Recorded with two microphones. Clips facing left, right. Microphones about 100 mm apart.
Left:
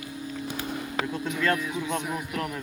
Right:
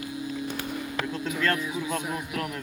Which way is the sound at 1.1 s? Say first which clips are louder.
Left 1 dB; 5° left (ahead or behind).